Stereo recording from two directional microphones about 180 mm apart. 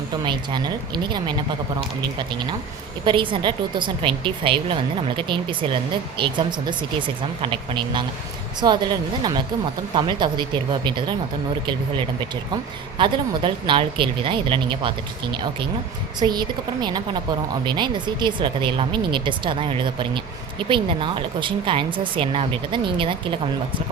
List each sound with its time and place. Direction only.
0.3 s speech: 25° right (ahead or behind)
3.0 s speech: 25° right (ahead or behind)